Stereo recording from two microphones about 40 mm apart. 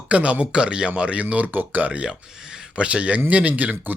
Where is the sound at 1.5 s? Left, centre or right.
Right.